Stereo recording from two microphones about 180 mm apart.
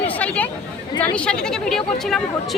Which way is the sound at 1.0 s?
5° left (ahead or behind).